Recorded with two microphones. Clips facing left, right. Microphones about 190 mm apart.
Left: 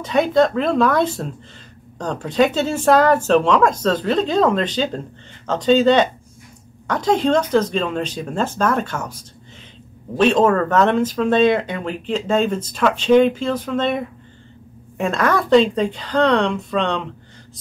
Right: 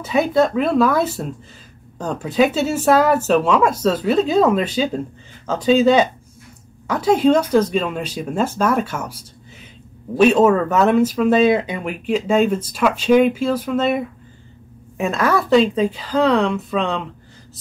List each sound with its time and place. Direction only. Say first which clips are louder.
0.0 s speech: left 1 dB; 5° right (ahead or behind)
10.1 s speech: right 2 dB; 10° right (ahead or behind)